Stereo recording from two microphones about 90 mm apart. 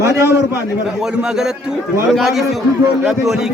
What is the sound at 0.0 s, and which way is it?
Speech, 30° right (ahead or behind).